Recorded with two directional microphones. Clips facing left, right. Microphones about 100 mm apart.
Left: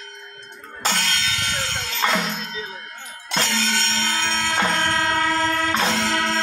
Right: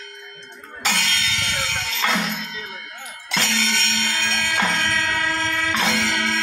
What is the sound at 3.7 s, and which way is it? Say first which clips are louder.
Music: left 1 dB; 35° left (ahead or behind).